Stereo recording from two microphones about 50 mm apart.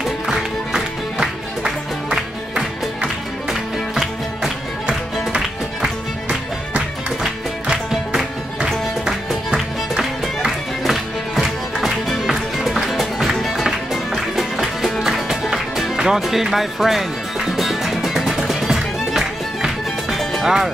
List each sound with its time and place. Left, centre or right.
0.0 s music: centre
5.3 s music: centre
7.9 s music: centre
10.4 s music: centre
20.4 s speech: centre